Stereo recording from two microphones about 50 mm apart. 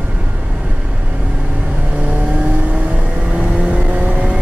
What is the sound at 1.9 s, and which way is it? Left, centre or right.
Vehicle, right.